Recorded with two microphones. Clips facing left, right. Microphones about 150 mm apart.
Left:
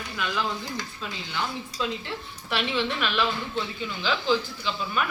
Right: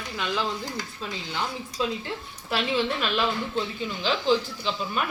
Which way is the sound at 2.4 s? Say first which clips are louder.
Right 2 dB; 30° right (ahead or behind).